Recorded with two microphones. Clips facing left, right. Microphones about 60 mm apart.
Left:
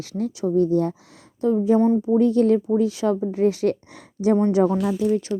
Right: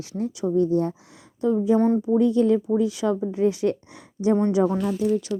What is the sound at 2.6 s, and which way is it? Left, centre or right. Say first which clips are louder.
Speech: left 2 dB; left.